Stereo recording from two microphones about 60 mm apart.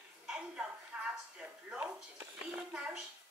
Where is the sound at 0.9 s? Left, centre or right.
Right.